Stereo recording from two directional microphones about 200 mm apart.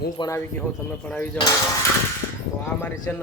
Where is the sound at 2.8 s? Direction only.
10° left (ahead or behind).